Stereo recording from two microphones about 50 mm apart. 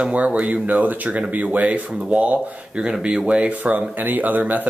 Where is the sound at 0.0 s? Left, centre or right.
Right.